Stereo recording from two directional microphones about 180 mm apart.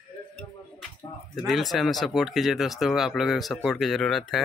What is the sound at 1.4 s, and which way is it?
Speech, centre (ahead or behind).